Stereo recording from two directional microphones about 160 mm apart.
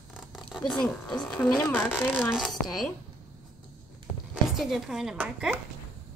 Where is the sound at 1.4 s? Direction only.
5° left (ahead or behind).